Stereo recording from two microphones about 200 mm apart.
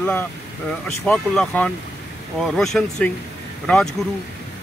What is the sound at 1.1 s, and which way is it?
Speech, 5° left (ahead or behind).